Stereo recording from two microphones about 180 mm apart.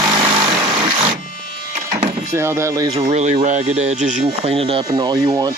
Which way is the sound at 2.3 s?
15° right (ahead or behind).